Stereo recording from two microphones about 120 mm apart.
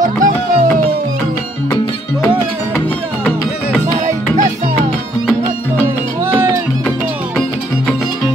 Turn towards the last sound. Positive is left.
turn(degrees=-20)  # may be behind; listen again after turning